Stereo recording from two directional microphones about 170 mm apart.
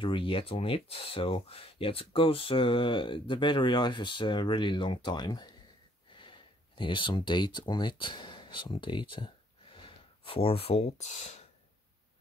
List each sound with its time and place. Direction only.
0.0 s speech: 30° left (ahead or behind)